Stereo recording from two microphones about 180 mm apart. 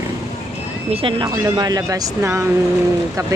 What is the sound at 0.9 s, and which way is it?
Speech, 30° right (ahead or behind).